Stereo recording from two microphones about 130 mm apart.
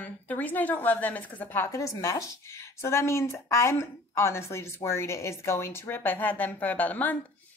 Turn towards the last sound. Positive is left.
turn(degrees=10)  # may be behind; listen again after turning